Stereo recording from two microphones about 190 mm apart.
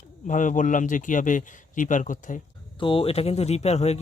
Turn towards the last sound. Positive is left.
turn(degrees=35)  # may be behind; listen again after turning